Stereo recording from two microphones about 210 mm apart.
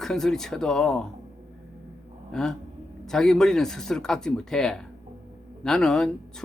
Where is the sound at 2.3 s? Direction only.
5° left (ahead or behind).